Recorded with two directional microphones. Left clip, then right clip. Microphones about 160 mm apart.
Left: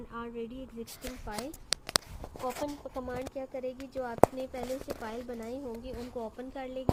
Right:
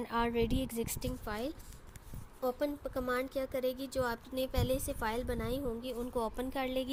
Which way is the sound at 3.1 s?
35° right (ahead or behind).